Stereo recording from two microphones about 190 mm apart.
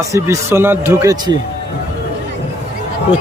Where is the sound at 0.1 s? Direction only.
15° right (ahead or behind).